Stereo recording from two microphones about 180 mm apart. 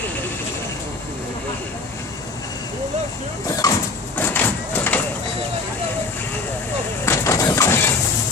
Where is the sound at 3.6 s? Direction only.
20° left (ahead or behind).